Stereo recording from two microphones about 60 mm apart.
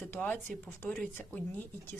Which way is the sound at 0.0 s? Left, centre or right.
Left.